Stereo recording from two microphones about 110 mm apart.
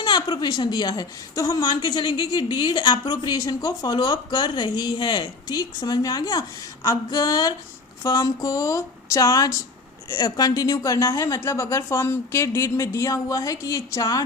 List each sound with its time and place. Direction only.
0.0 s a woman's voice: 40° left (ahead or behind)